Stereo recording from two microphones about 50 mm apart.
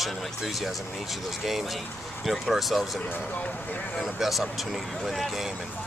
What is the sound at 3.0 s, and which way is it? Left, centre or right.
Speech, left.